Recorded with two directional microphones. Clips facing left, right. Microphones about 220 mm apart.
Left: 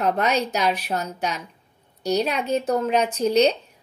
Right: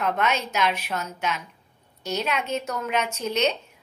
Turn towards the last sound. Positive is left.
turn(degrees=35)  # may be behind; listen again after turning